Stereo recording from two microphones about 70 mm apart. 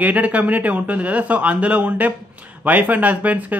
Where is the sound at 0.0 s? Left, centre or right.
Right.